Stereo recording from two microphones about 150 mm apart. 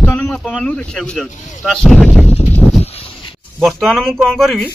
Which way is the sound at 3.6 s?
Centre (ahead or behind).